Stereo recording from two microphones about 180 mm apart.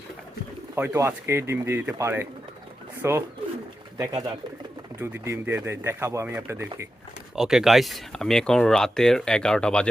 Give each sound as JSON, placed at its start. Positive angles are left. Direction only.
{"t": 0.8, "sound": "speech", "side_deg": -15}
{"t": 7.3, "sound": "speech", "side_deg": -5}